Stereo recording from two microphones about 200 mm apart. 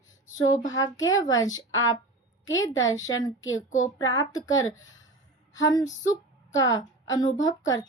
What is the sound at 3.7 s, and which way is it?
Speech, 40° left (ahead or behind).